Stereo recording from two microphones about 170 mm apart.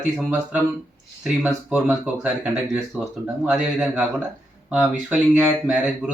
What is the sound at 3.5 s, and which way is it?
Speech, centre (ahead or behind).